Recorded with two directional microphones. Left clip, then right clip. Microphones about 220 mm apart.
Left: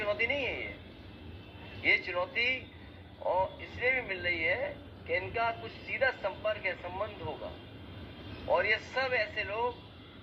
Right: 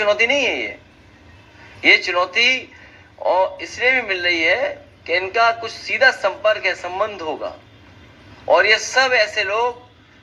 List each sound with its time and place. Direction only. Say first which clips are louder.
0.0 s speech: right 15 dB; 50° right (ahead or behind)
1.8 s speech: right 15 dB; 45° right (ahead or behind)